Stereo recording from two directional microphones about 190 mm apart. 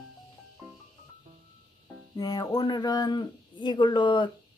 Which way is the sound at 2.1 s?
20° left (ahead or behind).